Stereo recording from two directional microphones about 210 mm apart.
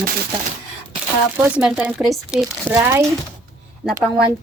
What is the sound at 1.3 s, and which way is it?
Speech, 10° right (ahead or behind).